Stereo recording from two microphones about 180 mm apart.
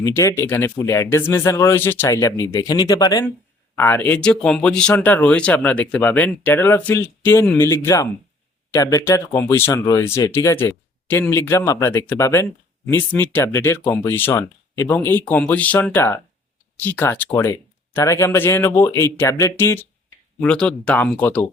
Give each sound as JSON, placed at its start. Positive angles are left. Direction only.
{"t": 0.0, "sound": "speech", "side_deg": 15}